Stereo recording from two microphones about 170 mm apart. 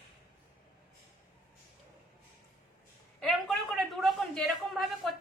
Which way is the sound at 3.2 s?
Centre (ahead or behind).